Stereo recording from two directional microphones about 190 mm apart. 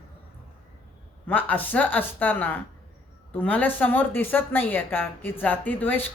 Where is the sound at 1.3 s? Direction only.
10° left (ahead or behind).